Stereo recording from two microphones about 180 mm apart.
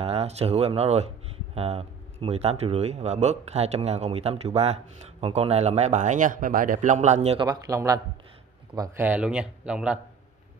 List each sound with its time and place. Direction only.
0.0 s speech: 35° right (ahead or behind)
7.3 s speech: 20° right (ahead or behind)
9.0 s speech: 5° right (ahead or behind)